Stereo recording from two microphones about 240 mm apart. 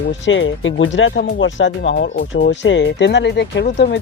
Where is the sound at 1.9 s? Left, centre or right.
Left.